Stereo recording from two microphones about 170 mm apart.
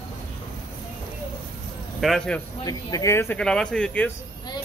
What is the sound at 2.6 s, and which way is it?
Speech, 20° left (ahead or behind).